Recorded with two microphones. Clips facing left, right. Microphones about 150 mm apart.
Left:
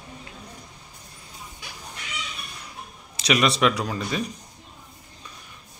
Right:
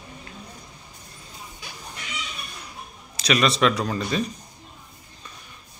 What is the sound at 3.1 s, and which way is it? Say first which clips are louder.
A man's voice: even; 15° left (ahead or behind).